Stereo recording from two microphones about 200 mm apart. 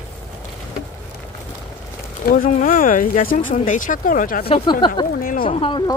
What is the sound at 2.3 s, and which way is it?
Speech, 45° left (ahead or behind).